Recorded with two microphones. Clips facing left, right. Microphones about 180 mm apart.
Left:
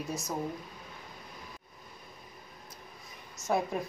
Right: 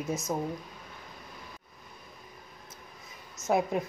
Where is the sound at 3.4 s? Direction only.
20° right (ahead or behind).